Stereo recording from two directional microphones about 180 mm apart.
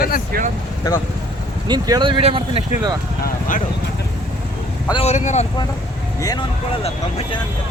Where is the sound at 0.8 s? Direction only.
20° left (ahead or behind).